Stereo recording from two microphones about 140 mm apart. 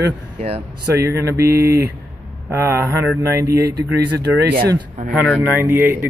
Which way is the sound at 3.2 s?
20° right (ahead or behind).